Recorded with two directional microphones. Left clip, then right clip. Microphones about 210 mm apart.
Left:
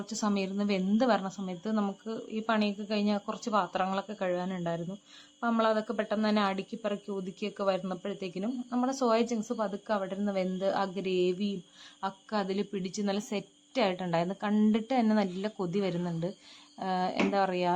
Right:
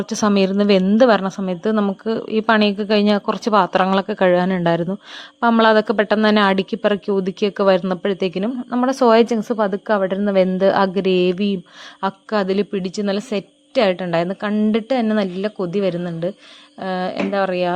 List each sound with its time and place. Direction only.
0.0 s a woman's voice: 40° right (ahead or behind); by 17.7 s 15° right (ahead or behind)